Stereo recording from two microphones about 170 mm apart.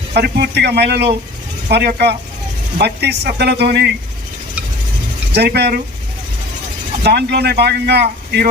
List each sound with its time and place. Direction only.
0.1 s speech: 70° right (ahead or behind)
5.3 s speech: 75° right (ahead or behind)
7.0 s speech: 75° right (ahead or behind)